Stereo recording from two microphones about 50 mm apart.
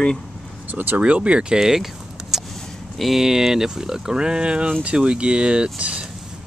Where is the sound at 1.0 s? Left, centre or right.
Right.